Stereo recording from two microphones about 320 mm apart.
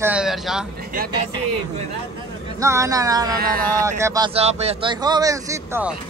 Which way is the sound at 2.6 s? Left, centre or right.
Centre.